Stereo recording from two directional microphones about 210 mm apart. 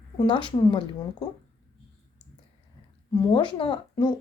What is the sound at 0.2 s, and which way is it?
Speech, 20° left (ahead or behind).